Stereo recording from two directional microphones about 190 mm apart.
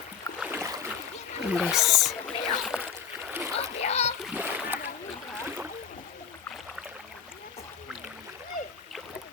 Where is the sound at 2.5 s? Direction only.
Centre (ahead or behind).